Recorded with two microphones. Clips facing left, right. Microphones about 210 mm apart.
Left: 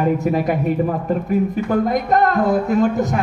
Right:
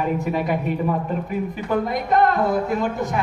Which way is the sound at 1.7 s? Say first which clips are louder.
Left 4 dB; 45° left (ahead or behind).